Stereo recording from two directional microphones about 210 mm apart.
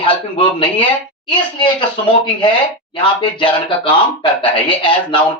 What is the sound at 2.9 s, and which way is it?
Speech, 20° left (ahead or behind).